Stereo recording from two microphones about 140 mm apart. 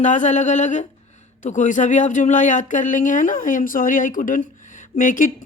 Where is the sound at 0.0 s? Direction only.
60° left (ahead or behind).